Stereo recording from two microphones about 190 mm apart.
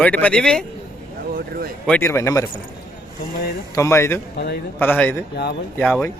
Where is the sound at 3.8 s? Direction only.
15° left (ahead or behind).